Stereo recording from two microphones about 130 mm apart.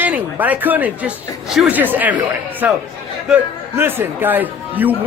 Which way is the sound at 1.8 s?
15° right (ahead or behind).